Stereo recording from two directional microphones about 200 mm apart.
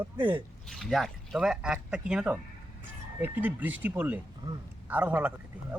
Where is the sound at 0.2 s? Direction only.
20° right (ahead or behind).